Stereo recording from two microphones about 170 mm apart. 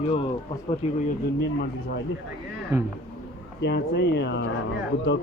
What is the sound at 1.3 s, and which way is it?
Speech, 70° left (ahead or behind).